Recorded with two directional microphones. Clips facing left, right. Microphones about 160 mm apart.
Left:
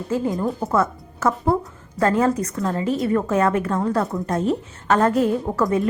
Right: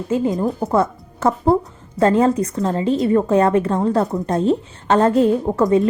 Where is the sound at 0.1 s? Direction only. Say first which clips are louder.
Right 3 dB; 20° right (ahead or behind).